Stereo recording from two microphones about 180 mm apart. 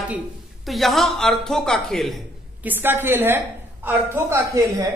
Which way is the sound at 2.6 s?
10° right (ahead or behind).